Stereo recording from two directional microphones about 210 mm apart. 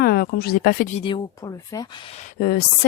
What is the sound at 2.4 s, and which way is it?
Speech, 45° left (ahead or behind).